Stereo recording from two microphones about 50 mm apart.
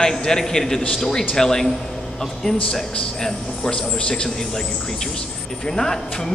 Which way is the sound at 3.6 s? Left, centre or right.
Centre.